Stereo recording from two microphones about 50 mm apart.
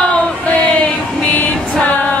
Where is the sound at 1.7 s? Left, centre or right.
Left.